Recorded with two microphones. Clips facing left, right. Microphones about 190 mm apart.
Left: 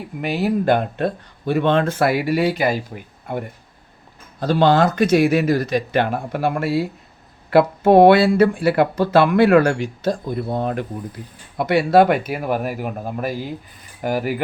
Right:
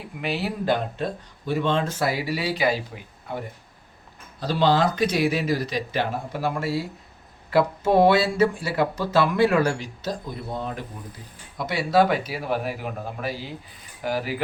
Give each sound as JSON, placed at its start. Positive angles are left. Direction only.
{"t": 0.2, "sound": "speech", "side_deg": 45}
{"t": 4.4, "sound": "speech", "side_deg": 55}